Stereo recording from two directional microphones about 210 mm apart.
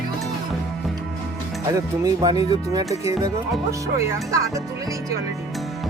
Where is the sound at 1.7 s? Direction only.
15° right (ahead or behind).